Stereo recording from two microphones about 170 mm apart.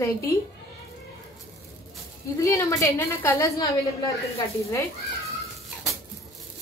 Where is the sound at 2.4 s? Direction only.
15° left (ahead or behind).